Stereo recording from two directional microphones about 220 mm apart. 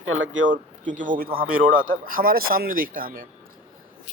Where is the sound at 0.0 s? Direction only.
65° right (ahead or behind).